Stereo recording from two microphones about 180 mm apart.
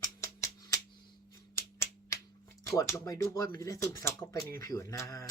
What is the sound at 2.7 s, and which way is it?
Speech, 15° left (ahead or behind).